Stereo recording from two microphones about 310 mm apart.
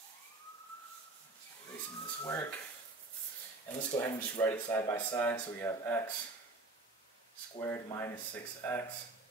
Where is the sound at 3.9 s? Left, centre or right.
Centre.